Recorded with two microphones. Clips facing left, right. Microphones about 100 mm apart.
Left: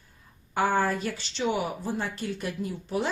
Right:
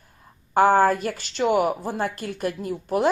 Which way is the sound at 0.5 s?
50° right (ahead or behind).